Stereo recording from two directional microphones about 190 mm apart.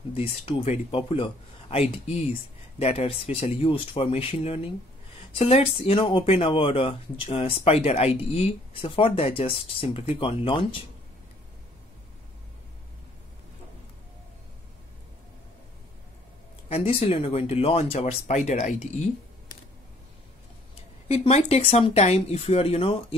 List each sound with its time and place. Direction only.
0.1 s speech: 30° left (ahead or behind)
16.6 s speech: 30° left (ahead or behind)
21.1 s speech: 35° left (ahead or behind)